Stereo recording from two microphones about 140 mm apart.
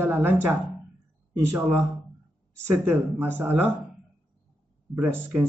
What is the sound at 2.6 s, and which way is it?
Speech, 15° right (ahead or behind).